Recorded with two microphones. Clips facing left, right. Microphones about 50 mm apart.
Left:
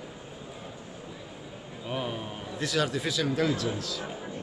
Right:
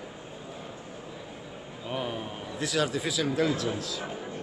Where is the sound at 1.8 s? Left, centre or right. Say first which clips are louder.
Even; centre.